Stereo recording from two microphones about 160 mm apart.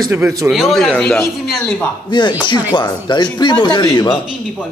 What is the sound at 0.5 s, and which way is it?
Speech, centre (ahead or behind).